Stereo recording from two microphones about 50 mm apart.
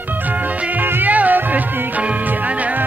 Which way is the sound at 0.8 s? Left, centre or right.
Right.